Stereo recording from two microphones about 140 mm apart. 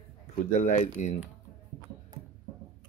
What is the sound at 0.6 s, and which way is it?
Speech, 60° left (ahead or behind).